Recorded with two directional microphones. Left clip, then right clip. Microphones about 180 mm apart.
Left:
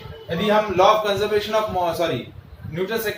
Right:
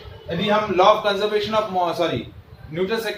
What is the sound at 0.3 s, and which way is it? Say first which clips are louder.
A man's voice: left 1 dB; 10° right (ahead or behind).